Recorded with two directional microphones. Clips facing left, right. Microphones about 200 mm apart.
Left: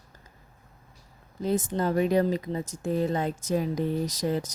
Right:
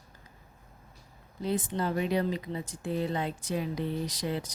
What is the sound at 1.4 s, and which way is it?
Speech, 45° left (ahead or behind).